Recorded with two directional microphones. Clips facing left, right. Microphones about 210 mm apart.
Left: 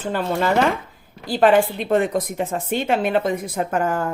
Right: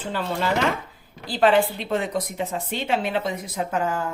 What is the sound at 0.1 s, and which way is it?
Speech, 50° left (ahead or behind).